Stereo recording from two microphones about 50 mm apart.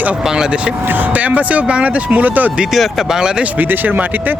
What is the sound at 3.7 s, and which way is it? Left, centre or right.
Speech, right.